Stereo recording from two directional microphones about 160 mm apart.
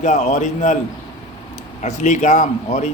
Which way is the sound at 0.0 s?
45° left (ahead or behind).